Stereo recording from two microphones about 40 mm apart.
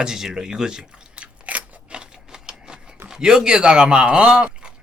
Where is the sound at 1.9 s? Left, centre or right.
Right.